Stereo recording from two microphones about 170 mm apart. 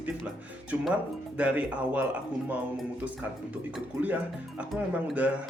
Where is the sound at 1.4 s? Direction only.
10° right (ahead or behind).